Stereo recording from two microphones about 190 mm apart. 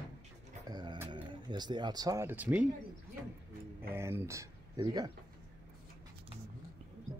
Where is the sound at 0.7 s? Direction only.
25° right (ahead or behind).